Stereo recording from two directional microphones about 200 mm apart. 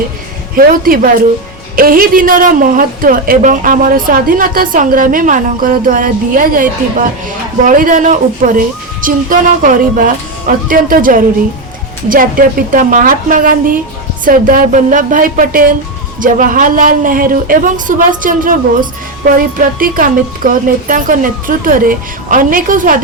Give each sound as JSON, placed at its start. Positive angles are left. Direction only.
{"t": 0.5, "sound": "a woman's voice", "side_deg": -45}